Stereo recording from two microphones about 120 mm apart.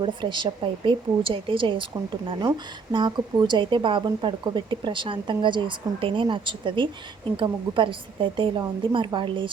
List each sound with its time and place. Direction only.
0.0 s speech: 40° right (ahead or behind)